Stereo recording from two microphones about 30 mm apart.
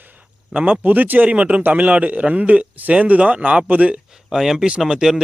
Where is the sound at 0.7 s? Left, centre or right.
Right.